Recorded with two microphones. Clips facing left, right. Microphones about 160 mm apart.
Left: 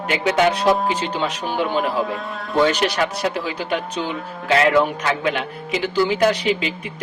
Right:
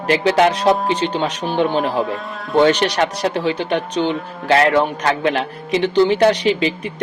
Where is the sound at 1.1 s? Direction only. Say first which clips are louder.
Right 3 dB; 30° right (ahead or behind).